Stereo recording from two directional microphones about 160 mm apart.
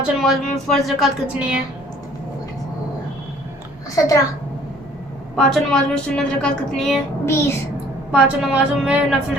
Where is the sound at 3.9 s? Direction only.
20° left (ahead or behind).